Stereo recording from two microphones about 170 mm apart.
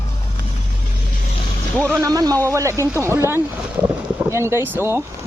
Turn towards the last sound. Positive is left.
turn(degrees=-15)  # may be behind; listen again after turning